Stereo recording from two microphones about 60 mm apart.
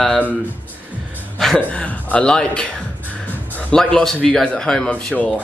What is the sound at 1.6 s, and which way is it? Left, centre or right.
A man's voice, left.